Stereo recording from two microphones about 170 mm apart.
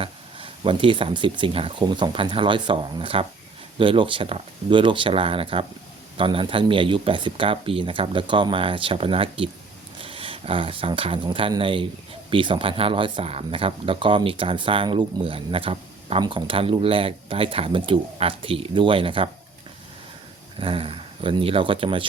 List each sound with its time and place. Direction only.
0.0 s speech: 30° right (ahead or behind)
20.6 s speech: 30° right (ahead or behind)